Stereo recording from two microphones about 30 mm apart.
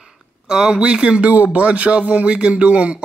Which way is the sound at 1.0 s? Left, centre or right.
Right.